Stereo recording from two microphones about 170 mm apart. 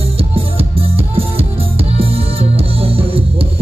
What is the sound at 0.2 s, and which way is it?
Music, 35° right (ahead or behind).